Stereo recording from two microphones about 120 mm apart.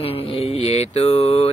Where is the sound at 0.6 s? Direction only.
60° left (ahead or behind).